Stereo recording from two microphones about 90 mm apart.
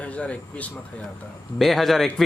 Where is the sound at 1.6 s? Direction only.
Centre (ahead or behind).